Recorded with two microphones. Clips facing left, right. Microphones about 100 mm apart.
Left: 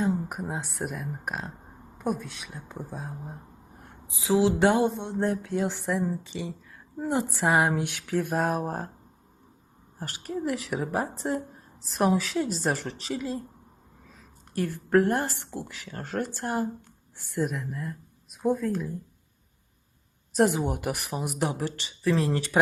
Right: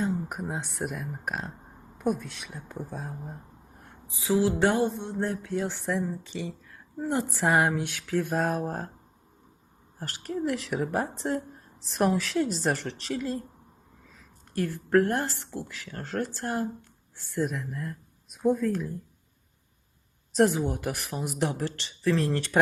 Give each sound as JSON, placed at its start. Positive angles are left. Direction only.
{"t": 0.0, "sound": "a woman's voice", "side_deg": 0}
{"t": 4.1, "sound": "speech", "side_deg": 20}
{"t": 10.0, "sound": "a woman's voice", "side_deg": 5}
{"t": 14.6, "sound": "speech", "side_deg": 15}
{"t": 20.3, "sound": "speech", "side_deg": 15}